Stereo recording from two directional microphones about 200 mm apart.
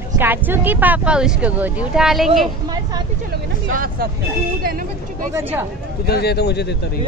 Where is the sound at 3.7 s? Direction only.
45° right (ahead or behind).